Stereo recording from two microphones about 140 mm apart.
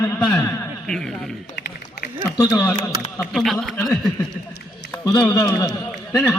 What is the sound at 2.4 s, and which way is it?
Speech, 20° left (ahead or behind).